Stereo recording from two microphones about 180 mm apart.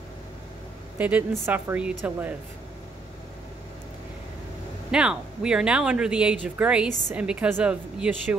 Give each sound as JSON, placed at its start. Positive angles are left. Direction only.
{"t": 0.9, "sound": "a woman's voice", "side_deg": -10}
{"t": 4.9, "sound": "a woman's voice", "side_deg": -5}